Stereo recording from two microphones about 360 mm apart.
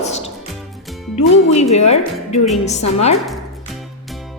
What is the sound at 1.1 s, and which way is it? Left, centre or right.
A woman's voice, centre.